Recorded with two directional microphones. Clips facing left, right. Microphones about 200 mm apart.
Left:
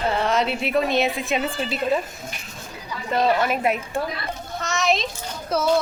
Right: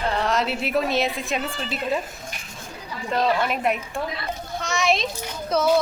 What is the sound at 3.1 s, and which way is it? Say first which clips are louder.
Speech: left 2 dB; 5° left (ahead or behind).